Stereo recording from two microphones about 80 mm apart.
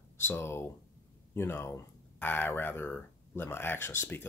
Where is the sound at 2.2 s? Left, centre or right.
Left.